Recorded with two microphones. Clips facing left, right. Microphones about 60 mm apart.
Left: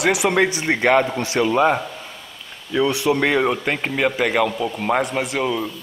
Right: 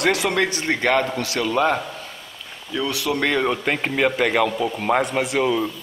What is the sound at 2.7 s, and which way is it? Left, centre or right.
Speech, left.